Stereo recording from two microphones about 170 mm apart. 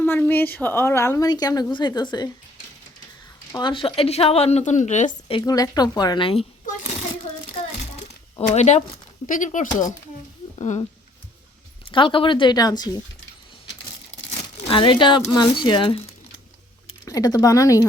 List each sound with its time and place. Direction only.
0.0 s a woman's voice: 10° left (ahead or behind)
3.5 s a woman's voice: 25° left (ahead or behind); by 5.4 s 45° left (ahead or behind)
5.4 s speech: 20° left (ahead or behind)
6.7 s a sound: 40° left (ahead or behind)
8.4 s a woman's voice: 40° left (ahead or behind)
11.9 s speech: 30° left (ahead or behind)
14.7 s speech: 30° left (ahead or behind)
17.1 s speech: 20° left (ahead or behind)